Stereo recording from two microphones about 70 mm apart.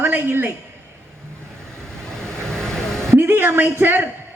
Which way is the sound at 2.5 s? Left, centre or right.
Centre.